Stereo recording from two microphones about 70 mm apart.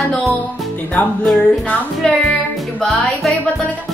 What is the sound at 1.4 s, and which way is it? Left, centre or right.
Music, centre.